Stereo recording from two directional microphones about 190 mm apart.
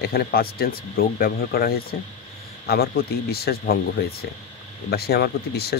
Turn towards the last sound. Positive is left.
turn(degrees=55)  # may be behind; listen again after turning